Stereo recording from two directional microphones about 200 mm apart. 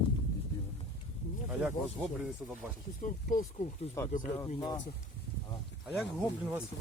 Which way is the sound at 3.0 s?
40° left (ahead or behind).